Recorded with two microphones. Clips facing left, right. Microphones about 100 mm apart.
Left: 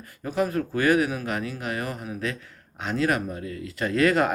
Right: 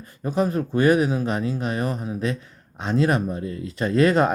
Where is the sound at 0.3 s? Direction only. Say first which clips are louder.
Right 3 dB; 25° right (ahead or behind).